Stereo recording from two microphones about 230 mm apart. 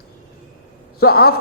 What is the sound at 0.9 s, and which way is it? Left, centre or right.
Speech, left.